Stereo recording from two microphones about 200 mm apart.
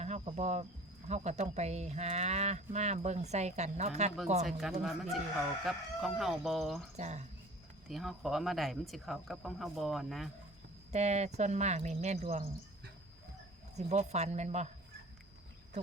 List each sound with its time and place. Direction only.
0.0 s speech: 35° right (ahead or behind)
4.8 s speech: centre (ahead or behind)
6.9 s speech: 35° right (ahead or behind)
7.9 s speech: centre (ahead or behind)
10.9 s speech: 35° right (ahead or behind)
13.7 s speech: 35° right (ahead or behind)